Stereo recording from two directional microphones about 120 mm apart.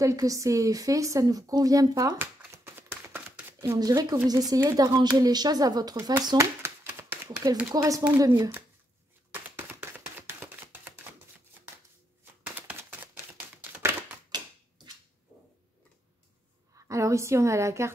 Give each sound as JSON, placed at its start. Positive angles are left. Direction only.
{"t": 0.0, "sound": "a woman's voice", "side_deg": -25}
{"t": 2.1, "sound": "a sound", "side_deg": -20}
{"t": 5.2, "sound": "a woman's voice", "side_deg": -35}
{"t": 9.3, "sound": "a sound", "side_deg": -20}
{"t": 12.5, "sound": "typewriter", "side_deg": -15}
{"t": 16.7, "sound": "a woman's voice", "side_deg": -25}